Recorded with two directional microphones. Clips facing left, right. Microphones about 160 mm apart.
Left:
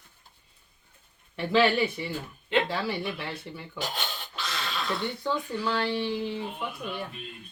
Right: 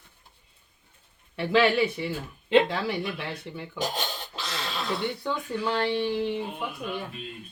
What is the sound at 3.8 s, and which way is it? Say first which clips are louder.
Dog: right 4 dB; 40° right (ahead or behind).